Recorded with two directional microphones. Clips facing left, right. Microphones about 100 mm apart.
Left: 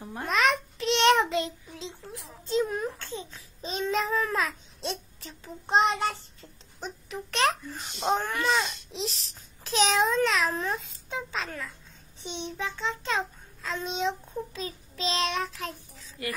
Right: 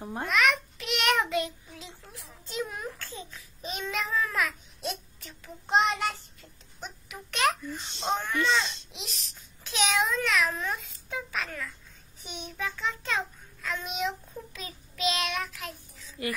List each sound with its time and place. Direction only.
0.0 s a child's voice: 25° right (ahead or behind)
0.3 s child singing: 30° left (ahead or behind)
6.8 s babbling: 35° left (ahead or behind)
8.0 s a child's voice: 30° left (ahead or behind)
12.2 s child singing: 25° left (ahead or behind)